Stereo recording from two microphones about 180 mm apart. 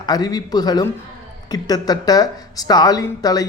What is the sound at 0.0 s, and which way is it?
Speech, 20° left (ahead or behind).